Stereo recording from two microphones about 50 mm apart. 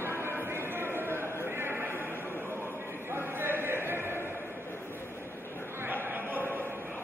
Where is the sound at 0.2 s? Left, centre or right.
Right.